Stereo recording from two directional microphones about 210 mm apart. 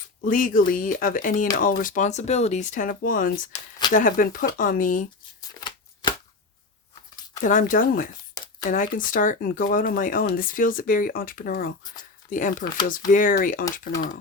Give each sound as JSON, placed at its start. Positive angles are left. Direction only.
{"t": 0.3, "sound": "speech", "side_deg": 40}
{"t": 5.4, "sound": "shuffling cards", "side_deg": 20}
{"t": 7.4, "sound": "speech", "side_deg": 40}